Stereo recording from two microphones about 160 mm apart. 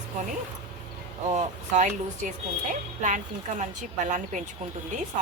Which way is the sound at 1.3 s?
45° right (ahead or behind).